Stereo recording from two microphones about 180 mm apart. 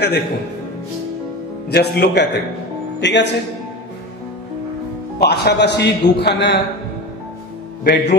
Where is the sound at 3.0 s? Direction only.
75° left (ahead or behind).